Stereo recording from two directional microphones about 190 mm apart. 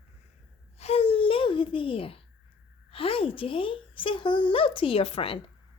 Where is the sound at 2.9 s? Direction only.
30° left (ahead or behind).